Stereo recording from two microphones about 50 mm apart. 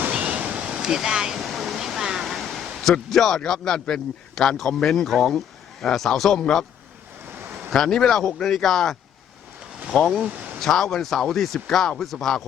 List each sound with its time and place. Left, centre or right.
0.1 s waves: right
0.6 s speech: centre
1.5 s a sound: centre
3.1 s speech: centre
7.7 s speech: centre